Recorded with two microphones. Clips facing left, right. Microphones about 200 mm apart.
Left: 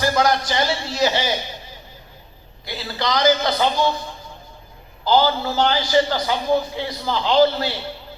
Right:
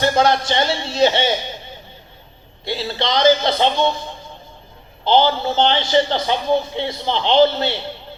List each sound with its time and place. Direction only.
0.0 s a man's voice: 25° right (ahead or behind)
2.6 s a man's voice: 25° right (ahead or behind)
5.0 s a man's voice: 25° right (ahead or behind)